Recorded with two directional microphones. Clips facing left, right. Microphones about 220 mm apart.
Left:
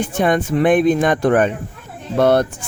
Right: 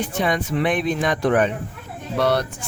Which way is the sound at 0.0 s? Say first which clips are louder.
Left 5 dB; 50° left (ahead or behind).